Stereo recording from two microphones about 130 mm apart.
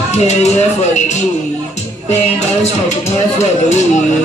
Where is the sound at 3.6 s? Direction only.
65° left (ahead or behind).